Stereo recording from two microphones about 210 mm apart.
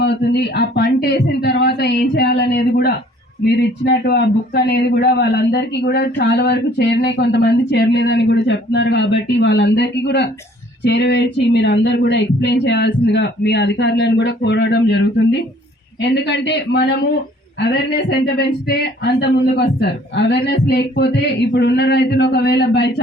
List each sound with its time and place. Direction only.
0.0 s speech: 50° left (ahead or behind)